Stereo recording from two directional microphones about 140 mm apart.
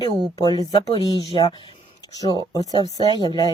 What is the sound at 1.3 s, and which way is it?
Speech, 30° left (ahead or behind).